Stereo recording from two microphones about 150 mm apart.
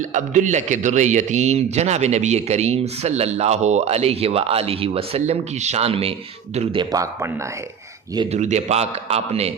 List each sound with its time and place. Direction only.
0.0 s a man's voice: 55° right (ahead or behind)
6.7 s a man's voice: 25° right (ahead or behind)
8.3 s a man's voice: 50° right (ahead or behind)